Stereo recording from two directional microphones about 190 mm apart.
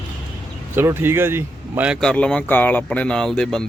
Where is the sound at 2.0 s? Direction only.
5° left (ahead or behind).